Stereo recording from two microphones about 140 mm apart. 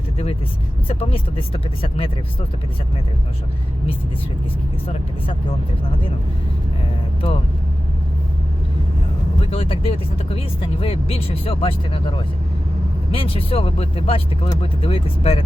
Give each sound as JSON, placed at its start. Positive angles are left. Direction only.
{"t": 0.9, "sound": "speech", "side_deg": 40}
{"t": 9.5, "sound": "speech", "side_deg": 40}